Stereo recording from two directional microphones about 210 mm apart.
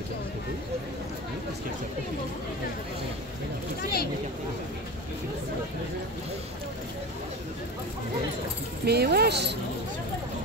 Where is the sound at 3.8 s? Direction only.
45° left (ahead or behind).